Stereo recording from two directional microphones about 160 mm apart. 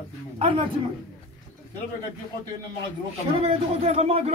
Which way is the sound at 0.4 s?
35° right (ahead or behind).